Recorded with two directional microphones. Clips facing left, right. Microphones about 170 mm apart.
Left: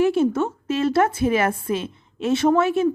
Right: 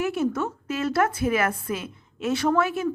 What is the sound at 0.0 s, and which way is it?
A woman's voice, 30° left (ahead or behind).